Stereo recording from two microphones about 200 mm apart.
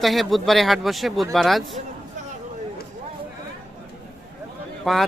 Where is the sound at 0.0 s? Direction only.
Centre (ahead or behind).